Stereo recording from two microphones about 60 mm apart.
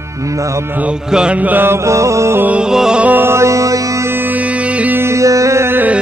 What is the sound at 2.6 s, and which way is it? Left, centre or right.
Music, centre.